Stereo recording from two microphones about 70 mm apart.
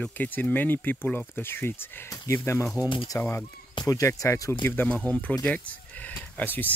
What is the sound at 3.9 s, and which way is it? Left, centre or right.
Speech, left.